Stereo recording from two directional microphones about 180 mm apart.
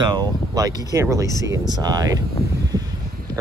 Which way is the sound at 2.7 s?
20° right (ahead or behind).